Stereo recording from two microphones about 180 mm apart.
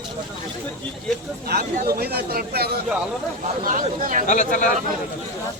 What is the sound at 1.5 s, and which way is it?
Speech, 60° right (ahead or behind).